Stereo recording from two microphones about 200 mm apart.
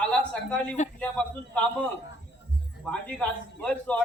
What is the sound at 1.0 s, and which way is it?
A man's voice, 5° left (ahead or behind).